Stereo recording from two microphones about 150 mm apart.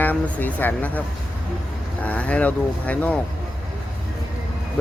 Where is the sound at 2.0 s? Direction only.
10° left (ahead or behind).